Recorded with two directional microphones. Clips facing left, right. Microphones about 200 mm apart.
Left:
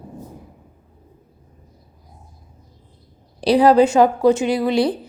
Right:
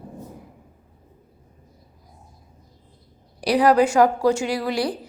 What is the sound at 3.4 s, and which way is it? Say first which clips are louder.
A woman's voice: left 4 dB; 25° left (ahead or behind).